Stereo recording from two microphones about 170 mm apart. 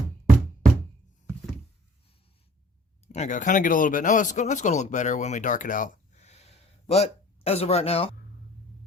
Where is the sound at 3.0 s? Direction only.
40° left (ahead or behind).